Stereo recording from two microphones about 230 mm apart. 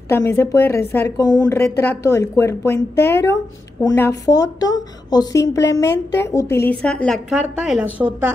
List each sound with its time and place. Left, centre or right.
0.1 s a woman's voice: centre
3.8 s a woman's voice: centre